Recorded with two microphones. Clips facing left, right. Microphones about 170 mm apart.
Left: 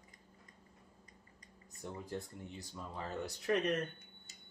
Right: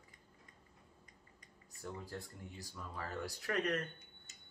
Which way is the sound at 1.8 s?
20° left (ahead or behind).